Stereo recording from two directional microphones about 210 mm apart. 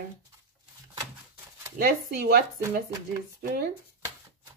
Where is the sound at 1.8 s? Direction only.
45° right (ahead or behind).